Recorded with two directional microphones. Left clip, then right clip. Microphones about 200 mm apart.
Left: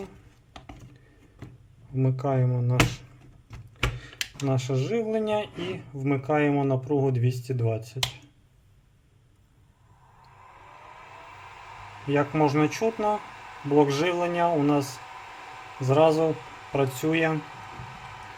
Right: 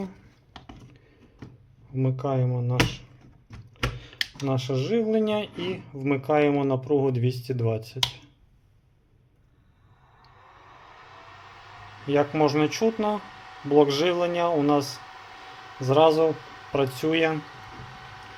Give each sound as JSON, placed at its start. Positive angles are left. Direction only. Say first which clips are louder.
{"t": 1.9, "sound": "speech", "louder": "even", "side_deg": 5}
{"t": 4.4, "sound": "speech", "louder": "even", "side_deg": 0}
{"t": 10.7, "sound": "a sound", "louder": "left 2 dB", "side_deg": 5}
{"t": 12.0, "sound": "speech", "louder": "right 2 dB", "side_deg": -10}
{"t": 13.1, "sound": "a sound", "louder": "left 1 dB", "side_deg": 5}
{"t": 13.7, "sound": "speech", "louder": "right 2 dB", "side_deg": -10}
{"t": 14.8, "sound": "speech", "louder": "right 1 dB", "side_deg": 10}
{"t": 15.9, "sound": "speech", "louder": "right 2 dB", "side_deg": -10}